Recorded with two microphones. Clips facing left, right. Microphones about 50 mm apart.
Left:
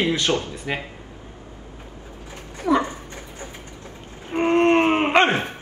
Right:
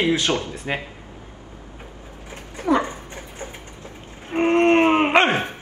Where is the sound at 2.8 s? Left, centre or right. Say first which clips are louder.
Even; right.